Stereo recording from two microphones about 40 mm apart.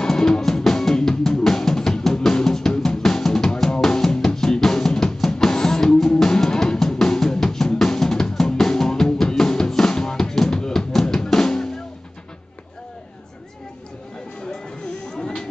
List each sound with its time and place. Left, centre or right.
0.0 s music: centre
10.9 s drum: centre
15.0 s a sound: centre